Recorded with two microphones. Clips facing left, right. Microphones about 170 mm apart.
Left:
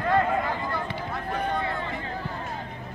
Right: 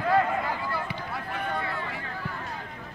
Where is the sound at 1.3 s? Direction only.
40° left (ahead or behind).